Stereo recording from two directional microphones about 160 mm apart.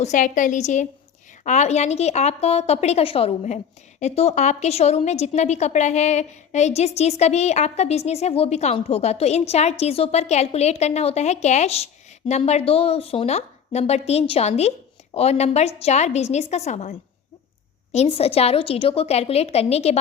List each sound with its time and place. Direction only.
0.0 s a woman's voice: 50° left (ahead or behind)
17.9 s a woman's voice: 40° left (ahead or behind)